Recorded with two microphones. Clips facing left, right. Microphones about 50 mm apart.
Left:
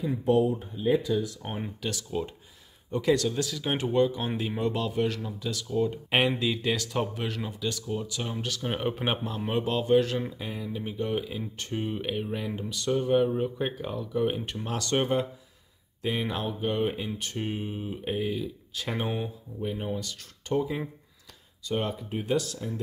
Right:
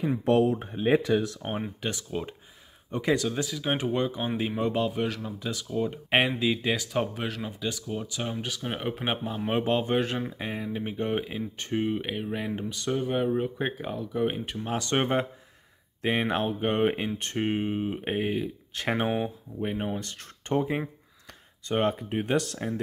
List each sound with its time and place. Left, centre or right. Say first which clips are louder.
0.2 s speech: even; right
1.8 s speech: even; right
3.2 s speech: even; centre
8.6 s speech: left 2 dB; centre
9.5 s speech: left 2 dB; right
12.0 s speech: even; centre
14.8 s speech: even; right